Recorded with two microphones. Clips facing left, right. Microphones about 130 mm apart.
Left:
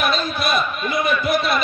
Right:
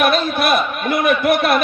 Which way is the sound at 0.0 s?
60° right (ahead or behind).